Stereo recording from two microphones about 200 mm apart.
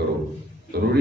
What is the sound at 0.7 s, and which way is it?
Speech, 55° right (ahead or behind).